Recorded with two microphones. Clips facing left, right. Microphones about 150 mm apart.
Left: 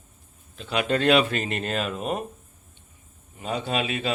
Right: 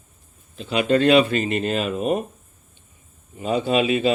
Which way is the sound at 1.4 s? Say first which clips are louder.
Right 5 dB; 5° right (ahead or behind).